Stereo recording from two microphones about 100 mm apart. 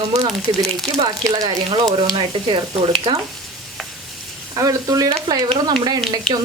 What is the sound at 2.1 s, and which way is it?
Speech, 60° right (ahead or behind).